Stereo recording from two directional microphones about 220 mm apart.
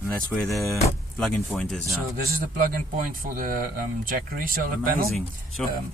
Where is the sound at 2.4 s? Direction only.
40° right (ahead or behind).